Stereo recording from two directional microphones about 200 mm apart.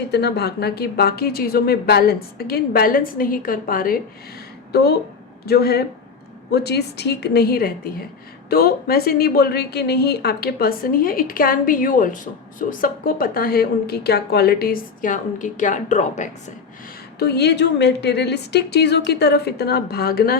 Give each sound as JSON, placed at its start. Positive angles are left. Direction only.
{"t": 0.1, "sound": "a woman's voice", "side_deg": 55}
{"t": 17.2, "sound": "a woman's voice", "side_deg": 55}